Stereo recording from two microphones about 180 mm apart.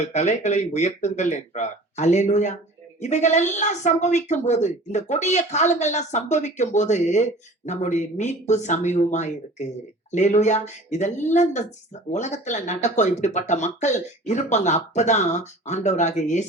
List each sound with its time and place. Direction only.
0.0 s a woman's voice: 40° left (ahead or behind)